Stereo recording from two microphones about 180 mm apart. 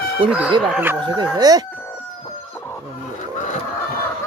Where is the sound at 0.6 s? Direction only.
5° right (ahead or behind).